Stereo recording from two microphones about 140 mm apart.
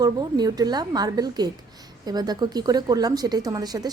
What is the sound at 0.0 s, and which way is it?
A woman's voice, 30° right (ahead or behind).